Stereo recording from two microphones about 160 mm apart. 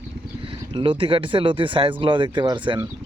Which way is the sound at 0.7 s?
30° right (ahead or behind).